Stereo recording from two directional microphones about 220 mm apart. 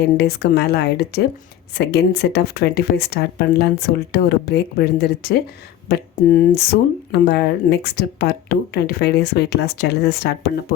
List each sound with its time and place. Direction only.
0.2 s speech: 45° left (ahead or behind)